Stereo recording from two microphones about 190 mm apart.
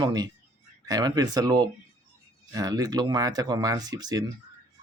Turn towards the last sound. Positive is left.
turn(degrees=-20)  # may be behind; listen again after turning